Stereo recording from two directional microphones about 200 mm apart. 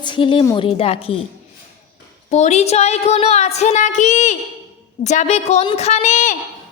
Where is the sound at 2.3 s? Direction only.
35° left (ahead or behind).